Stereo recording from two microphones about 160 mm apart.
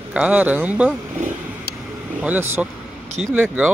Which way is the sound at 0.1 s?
10° right (ahead or behind).